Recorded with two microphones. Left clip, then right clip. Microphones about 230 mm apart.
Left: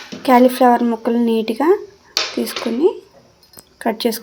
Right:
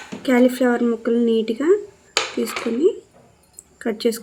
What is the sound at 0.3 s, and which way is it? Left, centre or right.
Speech, left.